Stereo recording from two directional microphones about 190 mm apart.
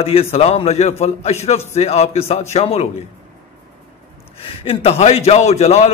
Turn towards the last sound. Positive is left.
turn(degrees=35)  # may be behind; listen again after turning